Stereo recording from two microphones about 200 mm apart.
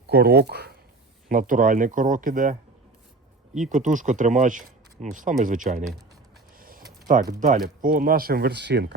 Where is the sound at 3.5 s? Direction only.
40° right (ahead or behind).